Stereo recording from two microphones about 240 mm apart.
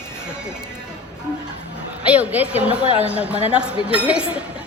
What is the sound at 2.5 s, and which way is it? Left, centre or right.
Speech, left.